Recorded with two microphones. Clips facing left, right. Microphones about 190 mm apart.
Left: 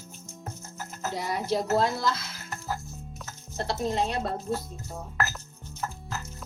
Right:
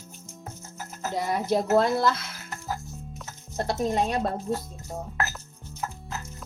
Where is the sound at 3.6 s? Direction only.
50° right (ahead or behind).